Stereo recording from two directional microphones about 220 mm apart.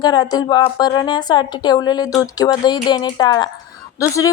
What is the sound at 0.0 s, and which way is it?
Speech, 20° left (ahead or behind).